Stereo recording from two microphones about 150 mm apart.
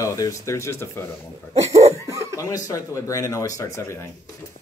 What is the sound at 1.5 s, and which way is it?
Cough, 45° right (ahead or behind).